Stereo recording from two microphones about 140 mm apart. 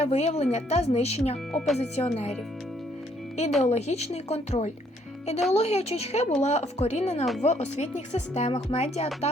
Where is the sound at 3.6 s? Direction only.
50° left (ahead or behind).